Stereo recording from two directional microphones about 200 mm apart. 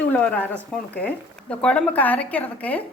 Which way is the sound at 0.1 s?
10° left (ahead or behind).